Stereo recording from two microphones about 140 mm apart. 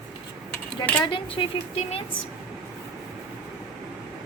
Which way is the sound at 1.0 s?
40° left (ahead or behind).